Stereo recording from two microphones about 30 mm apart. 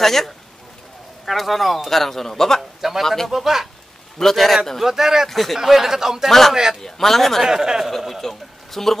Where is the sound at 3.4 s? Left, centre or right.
Centre.